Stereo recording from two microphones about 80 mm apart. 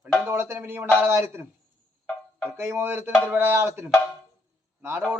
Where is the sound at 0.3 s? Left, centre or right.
Right.